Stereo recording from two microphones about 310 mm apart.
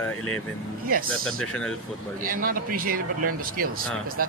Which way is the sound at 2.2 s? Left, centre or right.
Right.